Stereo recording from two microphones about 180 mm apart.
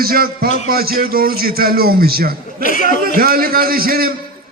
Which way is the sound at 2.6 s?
45° left (ahead or behind).